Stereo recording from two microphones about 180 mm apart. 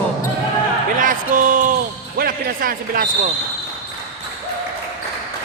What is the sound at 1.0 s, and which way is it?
A woman's voice, 45° right (ahead or behind).